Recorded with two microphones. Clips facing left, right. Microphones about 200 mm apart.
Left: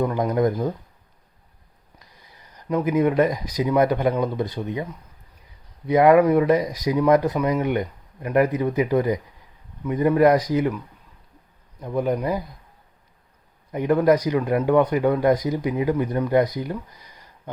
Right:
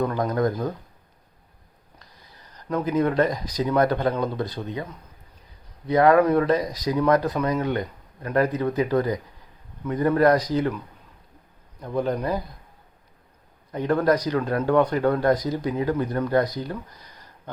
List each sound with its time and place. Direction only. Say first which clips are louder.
0.0 s speech: left 2 dB; 15° left (ahead or behind)
2.6 s speech: left 2 dB; 10° left (ahead or behind)
5.9 s speech: left 2 dB; 15° left (ahead or behind)
11.8 s speech: left 2 dB; 10° left (ahead or behind)
13.7 s speech: left 3 dB; 10° left (ahead or behind)